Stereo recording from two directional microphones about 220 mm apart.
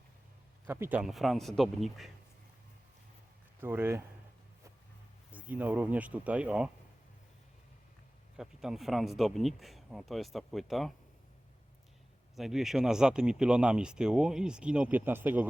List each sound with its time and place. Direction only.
0.7 s speech: 10° right (ahead or behind)
3.6 s speech: 10° right (ahead or behind)
5.3 s speech: 5° right (ahead or behind)
8.4 s speech: centre (ahead or behind)
12.4 s speech: centre (ahead or behind)